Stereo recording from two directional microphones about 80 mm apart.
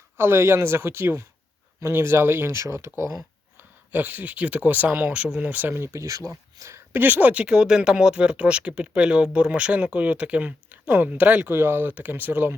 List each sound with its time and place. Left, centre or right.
0.2 s speech: right
3.6 s speech: right